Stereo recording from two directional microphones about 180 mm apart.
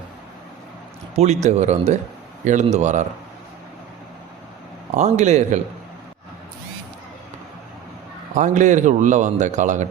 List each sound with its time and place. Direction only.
1.1 s speech: 40° right (ahead or behind)
4.9 s speech: 40° right (ahead or behind)
8.4 s a man's voice: 45° right (ahead or behind)